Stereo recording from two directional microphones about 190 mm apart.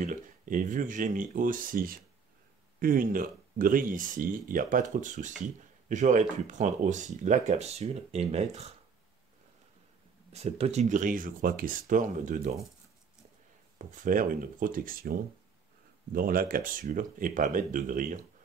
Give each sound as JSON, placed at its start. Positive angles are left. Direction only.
{"t": 0.0, "sound": "speech", "side_deg": -45}
{"t": 10.3, "sound": "speech", "side_deg": -35}
{"t": 13.7, "sound": "speech", "side_deg": -45}